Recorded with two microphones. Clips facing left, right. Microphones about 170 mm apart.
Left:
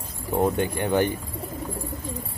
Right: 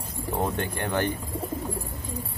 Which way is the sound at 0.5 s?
10° left (ahead or behind).